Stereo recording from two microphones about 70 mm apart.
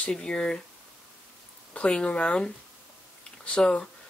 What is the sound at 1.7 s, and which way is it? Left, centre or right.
Speech, centre.